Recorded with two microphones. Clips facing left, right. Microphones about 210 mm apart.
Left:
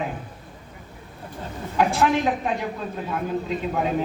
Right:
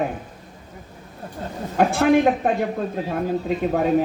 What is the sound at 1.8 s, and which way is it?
Speech, 55° right (ahead or behind).